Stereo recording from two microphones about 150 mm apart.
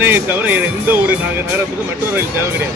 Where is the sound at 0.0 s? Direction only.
15° right (ahead or behind).